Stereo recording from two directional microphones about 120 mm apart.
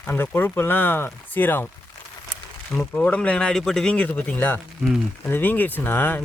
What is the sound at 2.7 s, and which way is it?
Speech, 10° left (ahead or behind).